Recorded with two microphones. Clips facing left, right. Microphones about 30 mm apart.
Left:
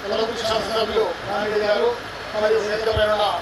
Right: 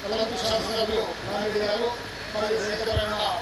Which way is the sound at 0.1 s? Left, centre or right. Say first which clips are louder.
Left 4 dB; centre.